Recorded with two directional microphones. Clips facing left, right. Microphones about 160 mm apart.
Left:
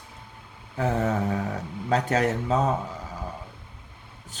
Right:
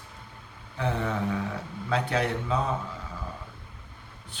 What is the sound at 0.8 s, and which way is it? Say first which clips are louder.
Speech: left 4 dB; 40° left (ahead or behind).